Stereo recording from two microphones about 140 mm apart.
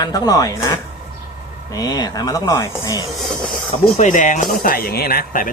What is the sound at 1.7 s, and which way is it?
Speech, 30° left (ahead or behind).